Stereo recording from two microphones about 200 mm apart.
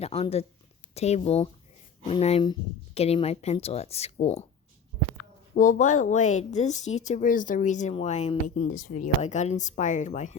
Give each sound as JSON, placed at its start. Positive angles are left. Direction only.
{"t": 0.0, "sound": "speech", "side_deg": 30}
{"t": 5.5, "sound": "speech", "side_deg": 40}